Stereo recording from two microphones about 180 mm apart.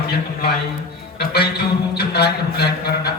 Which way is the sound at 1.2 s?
60° left (ahead or behind).